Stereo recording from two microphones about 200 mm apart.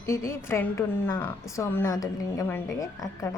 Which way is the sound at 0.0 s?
15° left (ahead or behind).